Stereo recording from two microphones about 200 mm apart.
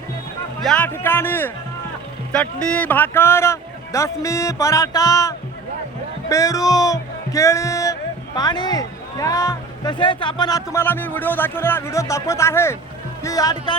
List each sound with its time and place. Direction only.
0.6 s speech: 5° left (ahead or behind)